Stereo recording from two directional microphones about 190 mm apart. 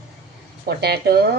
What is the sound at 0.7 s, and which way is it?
Speech, 60° right (ahead or behind).